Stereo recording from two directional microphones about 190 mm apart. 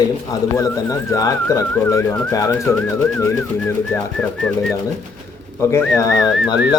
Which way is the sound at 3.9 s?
5° left (ahead or behind).